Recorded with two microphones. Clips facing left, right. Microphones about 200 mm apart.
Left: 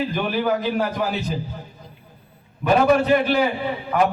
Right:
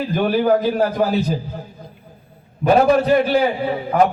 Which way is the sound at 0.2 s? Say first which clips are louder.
Right 9 dB; 40° right (ahead or behind).